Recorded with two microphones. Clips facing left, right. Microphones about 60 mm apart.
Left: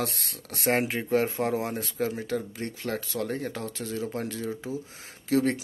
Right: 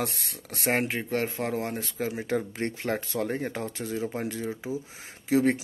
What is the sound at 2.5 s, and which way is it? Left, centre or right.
Speech, right.